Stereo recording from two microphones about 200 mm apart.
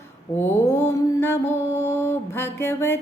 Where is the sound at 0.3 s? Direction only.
10° left (ahead or behind).